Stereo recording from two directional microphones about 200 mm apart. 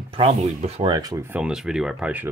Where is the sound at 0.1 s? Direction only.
30° right (ahead or behind); by 2.3 s 10° right (ahead or behind).